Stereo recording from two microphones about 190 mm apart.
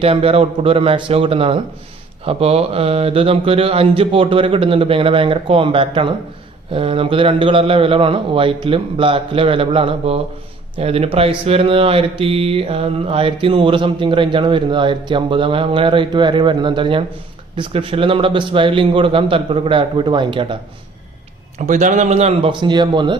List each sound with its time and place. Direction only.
0.0 s speech: 30° right (ahead or behind)
21.7 s speech: 40° right (ahead or behind); by 23.1 s 25° right (ahead or behind)